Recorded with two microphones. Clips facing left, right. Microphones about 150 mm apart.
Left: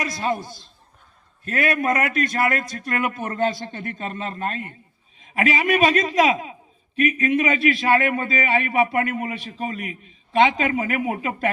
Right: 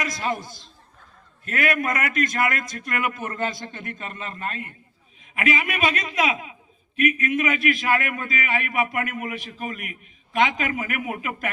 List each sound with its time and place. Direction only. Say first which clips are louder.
0.0 s a man's voice: left 2 dB; 30° left (ahead or behind)